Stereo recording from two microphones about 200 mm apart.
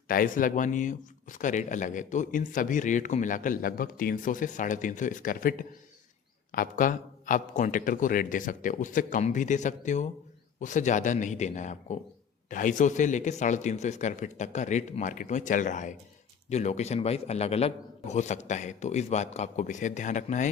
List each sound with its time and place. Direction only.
0.1 s speech: 45° left (ahead or behind)